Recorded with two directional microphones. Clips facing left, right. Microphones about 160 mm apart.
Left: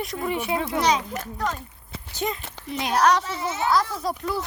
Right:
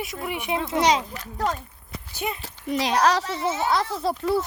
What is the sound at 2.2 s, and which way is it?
Speech, 15° right (ahead or behind).